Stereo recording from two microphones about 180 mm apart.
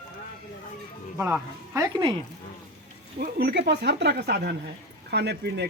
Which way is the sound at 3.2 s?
60° right (ahead or behind).